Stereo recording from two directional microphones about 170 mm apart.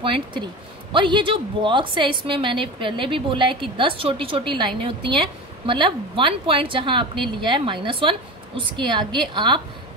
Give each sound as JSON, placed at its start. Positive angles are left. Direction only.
{"t": 0.0, "sound": "a woman's voice", "side_deg": -30}